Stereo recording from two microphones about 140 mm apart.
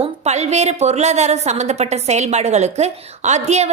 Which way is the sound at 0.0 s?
50° right (ahead or behind).